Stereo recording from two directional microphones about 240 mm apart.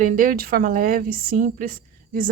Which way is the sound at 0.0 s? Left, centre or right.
Right.